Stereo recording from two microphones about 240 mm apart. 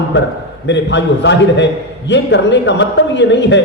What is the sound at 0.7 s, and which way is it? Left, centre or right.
A man's voice, left.